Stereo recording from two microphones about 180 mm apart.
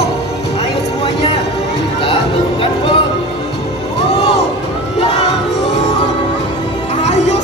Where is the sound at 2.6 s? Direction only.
30° left (ahead or behind).